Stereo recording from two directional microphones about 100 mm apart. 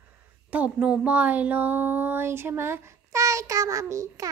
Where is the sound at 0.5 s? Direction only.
15° right (ahead or behind).